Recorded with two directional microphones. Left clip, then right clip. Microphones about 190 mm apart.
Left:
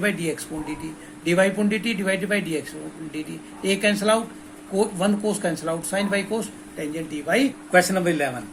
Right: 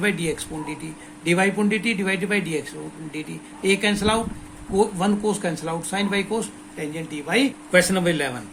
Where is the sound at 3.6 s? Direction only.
40° right (ahead or behind).